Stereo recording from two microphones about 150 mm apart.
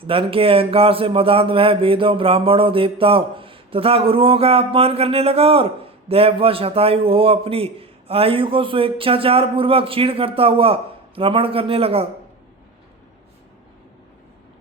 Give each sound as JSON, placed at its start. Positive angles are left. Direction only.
{"t": 0.0, "sound": "speech", "side_deg": -35}